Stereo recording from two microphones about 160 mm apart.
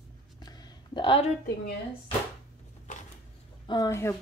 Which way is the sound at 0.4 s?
25° left (ahead or behind).